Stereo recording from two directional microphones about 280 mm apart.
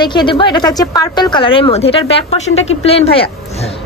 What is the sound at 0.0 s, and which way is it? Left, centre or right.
A woman's voice, centre.